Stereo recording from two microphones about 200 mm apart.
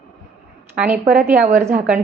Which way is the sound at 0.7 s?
5° right (ahead or behind).